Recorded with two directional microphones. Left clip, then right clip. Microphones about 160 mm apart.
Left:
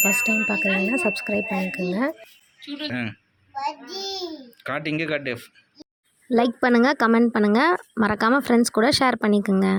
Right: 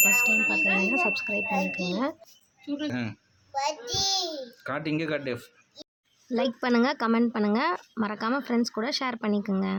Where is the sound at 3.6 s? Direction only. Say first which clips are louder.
Right 1 dB; 20° right (ahead or behind).